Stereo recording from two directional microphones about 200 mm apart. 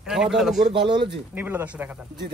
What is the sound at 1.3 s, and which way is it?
Speech, 10° right (ahead or behind).